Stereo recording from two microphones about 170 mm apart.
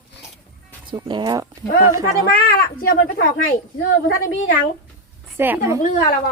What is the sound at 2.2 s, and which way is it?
Speech, 60° left (ahead or behind).